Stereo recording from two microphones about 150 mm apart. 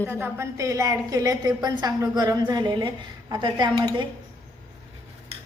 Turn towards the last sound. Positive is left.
turn(degrees=-25)  # may be behind; listen again after turning